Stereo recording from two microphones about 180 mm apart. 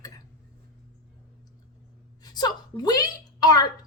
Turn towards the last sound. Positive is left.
turn(degrees=20)  # may be behind; listen again after turning